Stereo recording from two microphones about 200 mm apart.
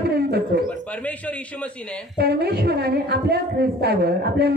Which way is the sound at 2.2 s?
55° right (ahead or behind).